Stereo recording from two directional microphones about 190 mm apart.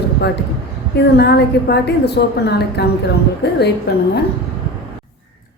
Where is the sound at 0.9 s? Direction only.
60° left (ahead or behind).